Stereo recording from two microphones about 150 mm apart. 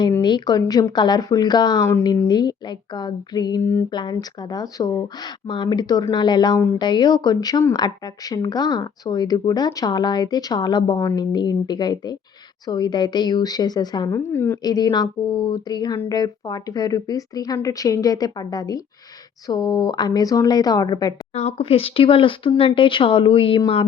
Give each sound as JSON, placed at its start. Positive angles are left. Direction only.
{"t": 0.2, "sound": "a sound", "side_deg": 30}
{"t": 0.6, "sound": "speech", "side_deg": 25}
{"t": 3.6, "sound": "a woman's voice", "side_deg": 20}
{"t": 3.8, "sound": "speech", "side_deg": 30}
{"t": 14.1, "sound": "a woman's voice", "side_deg": 15}
{"t": 14.6, "sound": "speech", "side_deg": 25}
{"t": 21.3, "sound": "speech", "side_deg": 45}